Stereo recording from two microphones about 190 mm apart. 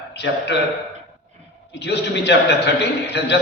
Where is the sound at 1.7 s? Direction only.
65° left (ahead or behind).